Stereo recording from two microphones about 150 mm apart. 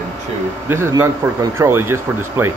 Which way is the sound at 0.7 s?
20° right (ahead or behind).